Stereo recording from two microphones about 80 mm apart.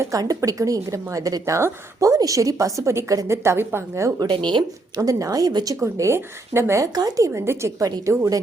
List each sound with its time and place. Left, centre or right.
0.0 s a woman's voice: right
4.9 s a woman's voice: right
5.8 s speech: right
7.3 s a woman's voice: right